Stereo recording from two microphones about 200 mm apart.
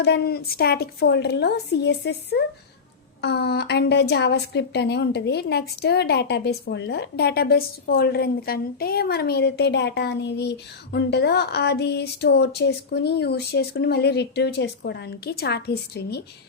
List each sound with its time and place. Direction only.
0.0 s a woman's voice: 55° left (ahead or behind)